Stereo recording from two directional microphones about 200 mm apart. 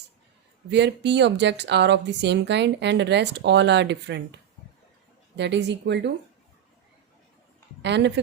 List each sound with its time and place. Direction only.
0.7 s speech: 60° right (ahead or behind)
5.4 s speech: 60° right (ahead or behind)
7.8 s a woman's voice: 60° right (ahead or behind)